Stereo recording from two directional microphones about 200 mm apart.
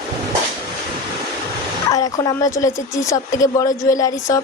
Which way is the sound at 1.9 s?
15° left (ahead or behind).